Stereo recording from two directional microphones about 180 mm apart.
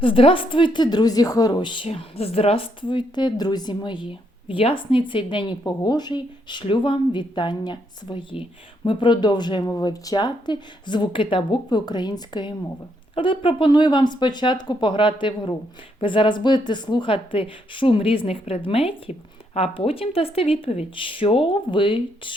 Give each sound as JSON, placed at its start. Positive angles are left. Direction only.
{"t": 0.0, "sound": "a woman's voice", "side_deg": 30}